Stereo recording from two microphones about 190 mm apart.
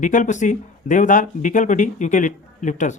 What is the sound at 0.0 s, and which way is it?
Speech, 40° left (ahead or behind).